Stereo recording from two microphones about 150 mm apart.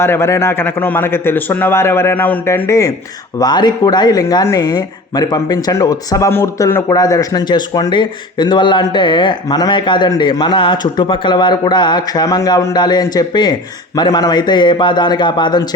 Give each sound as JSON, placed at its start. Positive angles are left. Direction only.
{"t": 0.0, "sound": "a man's voice", "side_deg": 15}